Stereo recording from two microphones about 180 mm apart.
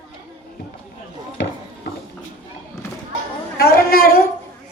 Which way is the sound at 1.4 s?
75° left (ahead or behind).